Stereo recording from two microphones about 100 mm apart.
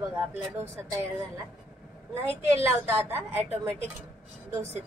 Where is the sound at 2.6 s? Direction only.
20° right (ahead or behind).